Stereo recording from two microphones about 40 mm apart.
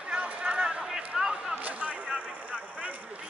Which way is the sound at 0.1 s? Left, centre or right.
Right.